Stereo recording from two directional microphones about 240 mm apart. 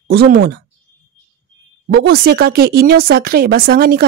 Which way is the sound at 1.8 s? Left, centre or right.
Right.